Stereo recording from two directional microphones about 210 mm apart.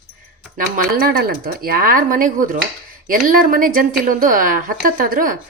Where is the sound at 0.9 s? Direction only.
45° right (ahead or behind).